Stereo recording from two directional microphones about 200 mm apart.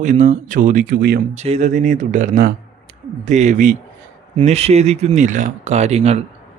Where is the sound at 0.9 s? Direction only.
50° right (ahead or behind).